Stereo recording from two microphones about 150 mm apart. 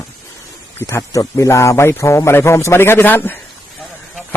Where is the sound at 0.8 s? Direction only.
20° left (ahead or behind).